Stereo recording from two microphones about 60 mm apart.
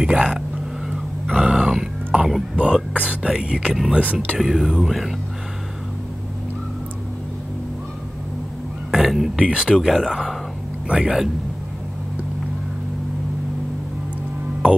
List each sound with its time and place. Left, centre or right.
0.0 s speech: centre
0.8 s a sound: centre
2.5 s speech: centre
3.3 s speech: centre
3.9 s speech: right
4.4 s speech: centre
8.9 s a sound: centre
9.4 s speech: centre
9.8 s speech: centre